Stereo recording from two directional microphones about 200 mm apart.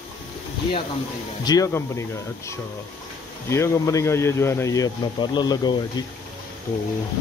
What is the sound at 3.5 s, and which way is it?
Speech, 15° left (ahead or behind).